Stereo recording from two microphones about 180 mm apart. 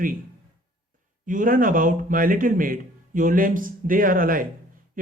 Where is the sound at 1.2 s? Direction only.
50° right (ahead or behind).